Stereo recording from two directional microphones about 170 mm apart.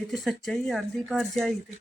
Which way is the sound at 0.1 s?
Centre (ahead or behind).